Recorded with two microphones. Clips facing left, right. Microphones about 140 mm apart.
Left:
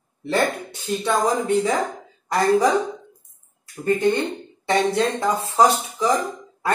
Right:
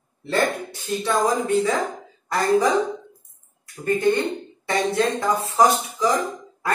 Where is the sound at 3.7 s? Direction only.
20° left (ahead or behind).